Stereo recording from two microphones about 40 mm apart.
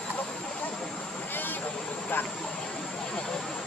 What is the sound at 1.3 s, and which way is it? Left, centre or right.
Vehicle, left.